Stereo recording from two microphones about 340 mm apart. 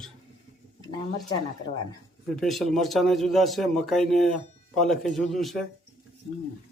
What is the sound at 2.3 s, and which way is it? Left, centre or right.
A man's voice, centre.